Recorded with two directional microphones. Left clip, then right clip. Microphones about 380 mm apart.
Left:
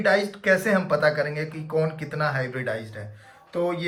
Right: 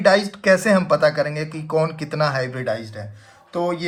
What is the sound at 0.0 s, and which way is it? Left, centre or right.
Speech, centre.